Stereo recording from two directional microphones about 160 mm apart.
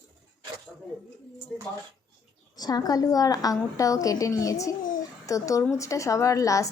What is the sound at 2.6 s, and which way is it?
A woman's voice, 25° left (ahead or behind).